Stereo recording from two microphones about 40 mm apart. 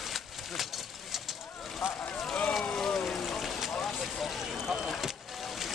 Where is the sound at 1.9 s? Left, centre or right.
Left.